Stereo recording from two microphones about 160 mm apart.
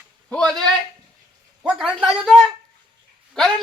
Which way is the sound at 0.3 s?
5° left (ahead or behind).